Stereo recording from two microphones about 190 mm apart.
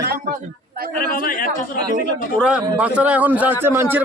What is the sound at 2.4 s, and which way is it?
A man's voice, 5° right (ahead or behind).